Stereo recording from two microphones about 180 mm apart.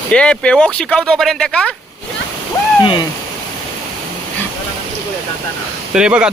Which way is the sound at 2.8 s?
25° left (ahead or behind).